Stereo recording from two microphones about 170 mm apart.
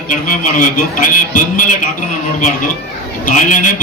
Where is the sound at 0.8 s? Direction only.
50° left (ahead or behind).